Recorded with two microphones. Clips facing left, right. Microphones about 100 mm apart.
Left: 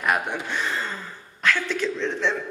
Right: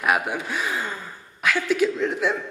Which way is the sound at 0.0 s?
5° right (ahead or behind).